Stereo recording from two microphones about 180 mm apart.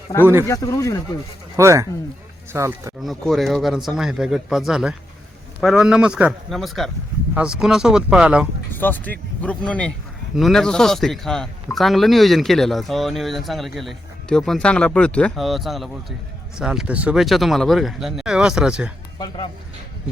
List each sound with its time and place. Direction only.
0.1 s speech: 20° left (ahead or behind)
1.5 s speech: 15° right (ahead or behind)
3.0 s a man's voice: centre (ahead or behind)
8.7 s a man's voice: 10° left (ahead or behind)